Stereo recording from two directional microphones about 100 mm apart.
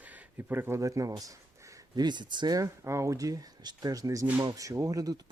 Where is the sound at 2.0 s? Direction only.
50° right (ahead or behind).